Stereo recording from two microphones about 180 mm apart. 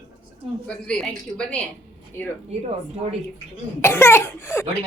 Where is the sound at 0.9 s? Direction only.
5° left (ahead or behind).